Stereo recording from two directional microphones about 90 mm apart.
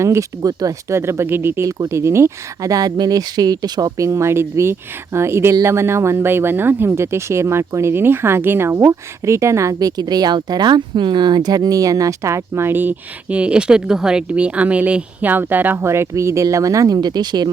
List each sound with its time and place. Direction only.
0.0 s speech: 35° right (ahead or behind)
10.0 s speech: 50° right (ahead or behind)